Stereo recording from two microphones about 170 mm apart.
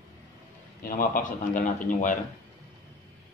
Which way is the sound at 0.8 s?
55° left (ahead or behind).